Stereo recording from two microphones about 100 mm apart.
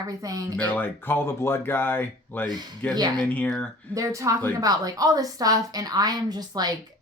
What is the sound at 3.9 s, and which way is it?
A woman's voice, 30° right (ahead or behind).